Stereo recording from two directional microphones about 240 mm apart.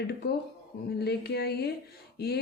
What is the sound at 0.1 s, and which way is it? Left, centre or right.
Speech, left.